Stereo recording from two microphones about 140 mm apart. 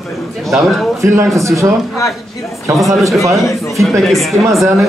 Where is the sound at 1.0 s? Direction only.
20° right (ahead or behind).